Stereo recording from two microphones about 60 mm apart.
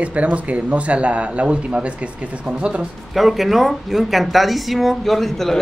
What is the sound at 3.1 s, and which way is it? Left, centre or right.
Speech, centre.